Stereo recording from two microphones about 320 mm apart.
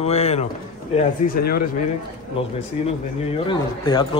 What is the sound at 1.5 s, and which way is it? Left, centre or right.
Speech, left.